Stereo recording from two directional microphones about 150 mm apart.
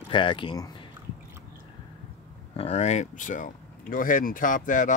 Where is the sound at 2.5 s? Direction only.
45° left (ahead or behind).